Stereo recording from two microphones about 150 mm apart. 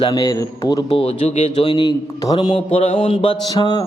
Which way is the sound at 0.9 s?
40° left (ahead or behind).